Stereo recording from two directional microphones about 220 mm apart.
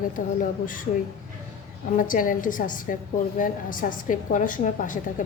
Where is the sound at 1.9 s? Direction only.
40° left (ahead or behind).